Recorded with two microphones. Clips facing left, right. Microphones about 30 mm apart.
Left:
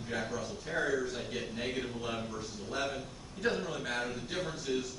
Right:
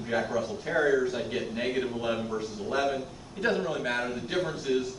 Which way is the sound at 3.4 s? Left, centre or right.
Right.